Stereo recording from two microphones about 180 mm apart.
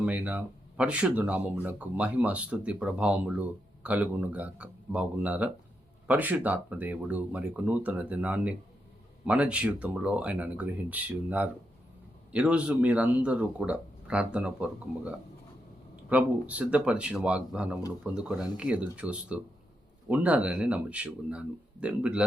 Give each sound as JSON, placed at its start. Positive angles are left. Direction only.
{"t": 0.0, "sound": "speech", "side_deg": -10}